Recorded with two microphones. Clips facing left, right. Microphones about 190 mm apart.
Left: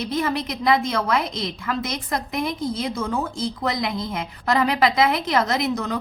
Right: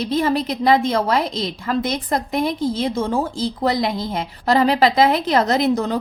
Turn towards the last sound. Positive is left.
turn(degrees=-30)  # may be behind; listen again after turning